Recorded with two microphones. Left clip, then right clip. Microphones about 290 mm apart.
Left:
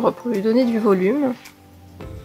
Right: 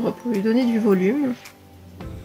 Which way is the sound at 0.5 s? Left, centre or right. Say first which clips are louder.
Left 3 dB; centre.